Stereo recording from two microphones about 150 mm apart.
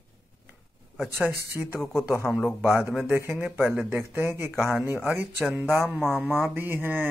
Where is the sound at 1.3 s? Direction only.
15° right (ahead or behind).